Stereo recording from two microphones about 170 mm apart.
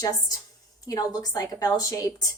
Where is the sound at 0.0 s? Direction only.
20° left (ahead or behind).